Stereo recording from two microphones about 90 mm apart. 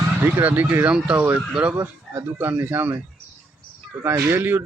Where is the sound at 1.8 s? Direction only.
25° right (ahead or behind).